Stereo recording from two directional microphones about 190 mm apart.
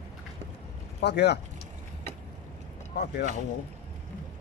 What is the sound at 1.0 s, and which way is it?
Speech, 60° left (ahead or behind).